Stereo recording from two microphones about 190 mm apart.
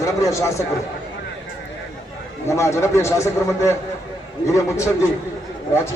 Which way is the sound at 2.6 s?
15° left (ahead or behind).